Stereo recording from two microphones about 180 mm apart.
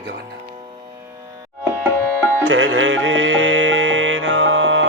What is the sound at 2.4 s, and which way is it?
Music, 90° right.